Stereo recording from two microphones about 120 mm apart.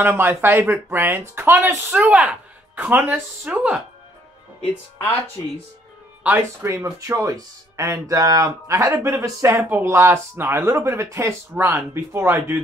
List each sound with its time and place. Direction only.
0.0 s speech: 15° right (ahead or behind)
6.2 s speech: 20° right (ahead or behind)